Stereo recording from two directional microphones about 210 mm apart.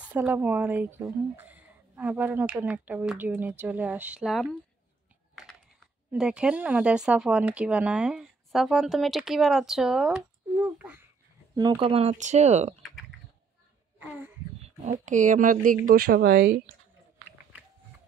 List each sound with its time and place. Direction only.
0.0 s speech: 5° right (ahead or behind)
6.1 s speech: 5° right (ahead or behind)
11.5 s speech: 20° right (ahead or behind)
14.0 s speech: 10° right (ahead or behind)
14.8 s speech: 35° right (ahead or behind)